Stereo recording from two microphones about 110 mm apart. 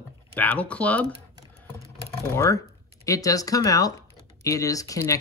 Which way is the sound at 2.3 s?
25° left (ahead or behind).